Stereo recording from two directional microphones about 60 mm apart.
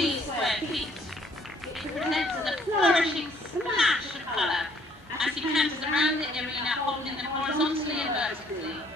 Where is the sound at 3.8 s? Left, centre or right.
Centre.